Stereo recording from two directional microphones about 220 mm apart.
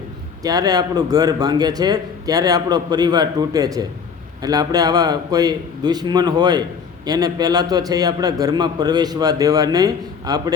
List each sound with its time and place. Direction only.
0.4 s a man's voice: 15° right (ahead or behind)